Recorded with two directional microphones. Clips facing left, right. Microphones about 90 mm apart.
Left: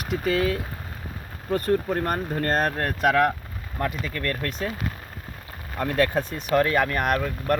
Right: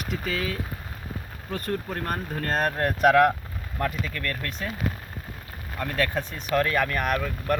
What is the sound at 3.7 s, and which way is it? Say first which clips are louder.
Speech: left 1 dB; 5° left (ahead or behind).